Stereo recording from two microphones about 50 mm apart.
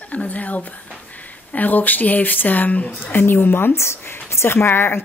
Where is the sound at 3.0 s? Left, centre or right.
Left.